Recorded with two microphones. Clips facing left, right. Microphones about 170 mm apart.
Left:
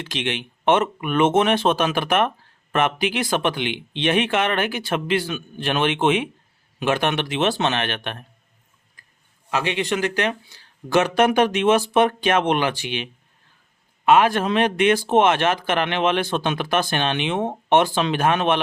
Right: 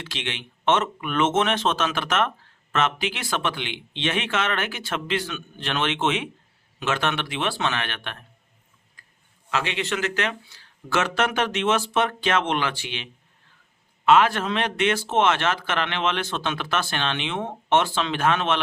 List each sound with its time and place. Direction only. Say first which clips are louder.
0.0 s a man's voice: left 6 dB; 15° left (ahead or behind)
9.5 s speech: left 4 dB; 15° left (ahead or behind)